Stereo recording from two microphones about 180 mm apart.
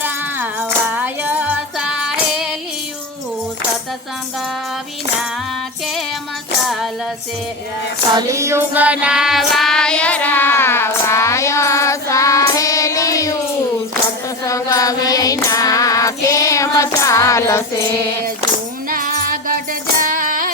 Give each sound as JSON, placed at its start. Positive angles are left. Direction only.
{"t": 0.0, "sound": "music", "side_deg": -10}
{"t": 6.7, "sound": "music", "side_deg": 0}
{"t": 8.1, "sound": "child singing", "side_deg": -15}
{"t": 14.4, "sound": "child singing", "side_deg": 20}
{"t": 18.9, "sound": "music", "side_deg": -50}